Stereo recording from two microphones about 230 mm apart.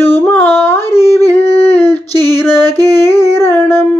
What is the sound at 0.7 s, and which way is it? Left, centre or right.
Humming, centre.